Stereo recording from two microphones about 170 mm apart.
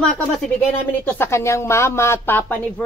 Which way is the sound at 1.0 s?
15° left (ahead or behind).